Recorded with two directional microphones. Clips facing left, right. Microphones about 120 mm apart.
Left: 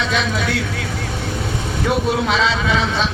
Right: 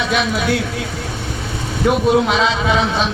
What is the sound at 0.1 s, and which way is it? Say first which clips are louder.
Speech: right 3 dB; 15° right (ahead or behind).